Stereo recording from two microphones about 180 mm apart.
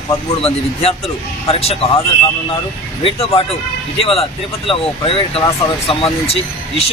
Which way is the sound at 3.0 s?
30° left (ahead or behind).